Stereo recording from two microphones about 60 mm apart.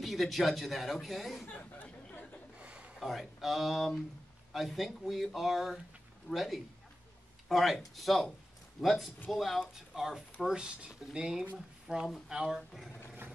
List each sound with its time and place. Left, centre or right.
0.0 s speech: centre
1.5 s chatter: left
2.6 s a sound: right
3.0 s speech: centre